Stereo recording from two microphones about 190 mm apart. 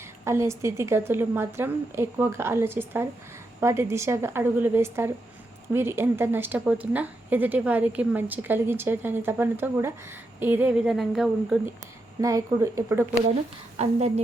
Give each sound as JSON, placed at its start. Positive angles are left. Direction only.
{"t": 0.3, "sound": "a woman's voice", "side_deg": -15}
{"t": 12.2, "sound": "a woman's voice", "side_deg": -15}
{"t": 13.8, "sound": "a woman's voice", "side_deg": -35}